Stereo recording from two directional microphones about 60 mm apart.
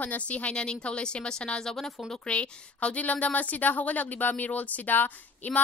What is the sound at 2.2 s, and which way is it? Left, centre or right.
A woman's voice, centre.